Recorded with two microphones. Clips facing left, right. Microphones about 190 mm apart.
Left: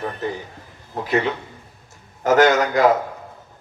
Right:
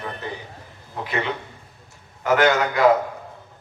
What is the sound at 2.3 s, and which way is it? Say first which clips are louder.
Speech: left 3 dB; 40° left (ahead or behind).